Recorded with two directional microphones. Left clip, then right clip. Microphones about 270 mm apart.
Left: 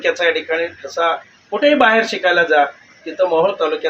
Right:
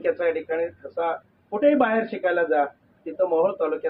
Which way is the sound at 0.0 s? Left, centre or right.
Centre.